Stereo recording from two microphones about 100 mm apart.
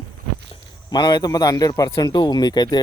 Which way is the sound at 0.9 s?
45° left (ahead or behind).